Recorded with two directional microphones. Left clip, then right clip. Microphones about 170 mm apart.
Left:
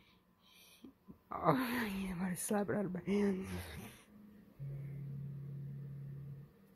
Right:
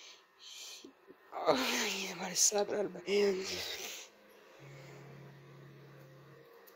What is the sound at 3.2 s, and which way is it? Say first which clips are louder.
Speech: right 7 dB; 20° right (ahead or behind).